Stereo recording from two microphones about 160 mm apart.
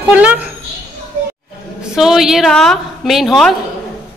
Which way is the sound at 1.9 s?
5° right (ahead or behind).